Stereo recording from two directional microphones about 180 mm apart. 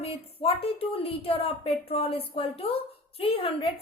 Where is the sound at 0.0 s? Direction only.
35° left (ahead or behind).